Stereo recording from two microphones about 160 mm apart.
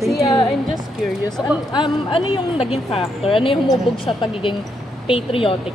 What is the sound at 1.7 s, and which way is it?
A woman's voice, 30° left (ahead or behind).